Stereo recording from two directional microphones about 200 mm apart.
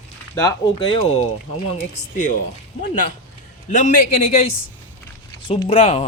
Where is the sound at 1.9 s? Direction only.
40° left (ahead or behind).